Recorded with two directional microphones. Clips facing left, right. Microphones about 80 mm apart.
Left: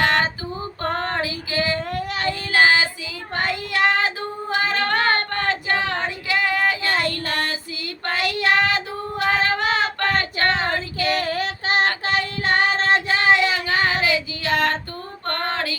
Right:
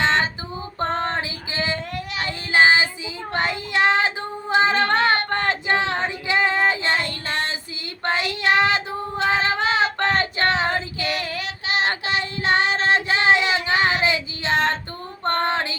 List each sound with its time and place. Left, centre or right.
0.0 s female singing: right
1.9 s child singing: left
2.5 s child singing: right
4.5 s female singing: right
10.0 s child singing: right
11.0 s child singing: left
12.6 s music: left
12.9 s female singing: right